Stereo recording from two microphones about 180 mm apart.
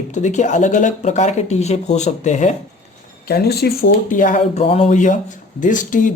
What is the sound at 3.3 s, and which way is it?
Speech, 60° left (ahead or behind).